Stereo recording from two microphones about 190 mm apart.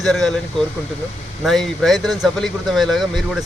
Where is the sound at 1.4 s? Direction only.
Centre (ahead or behind).